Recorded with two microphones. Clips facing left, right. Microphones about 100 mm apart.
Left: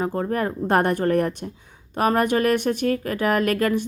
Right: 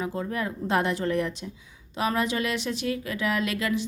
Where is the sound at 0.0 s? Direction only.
50° left (ahead or behind).